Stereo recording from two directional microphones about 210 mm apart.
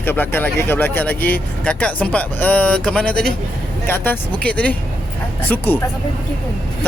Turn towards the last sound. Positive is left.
turn(degrees=10)  # may be behind; listen again after turning